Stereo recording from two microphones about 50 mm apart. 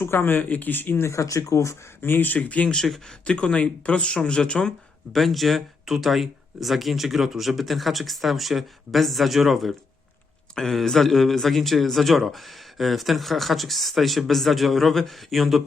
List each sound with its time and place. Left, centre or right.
0.0 s speech: left
0.9 s speech: left
2.0 s speech: left
2.6 s speech: centre
5.1 s speech: centre